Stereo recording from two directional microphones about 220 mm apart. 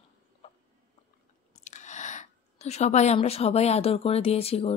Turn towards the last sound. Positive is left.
turn(degrees=25)  # may be behind; listen again after turning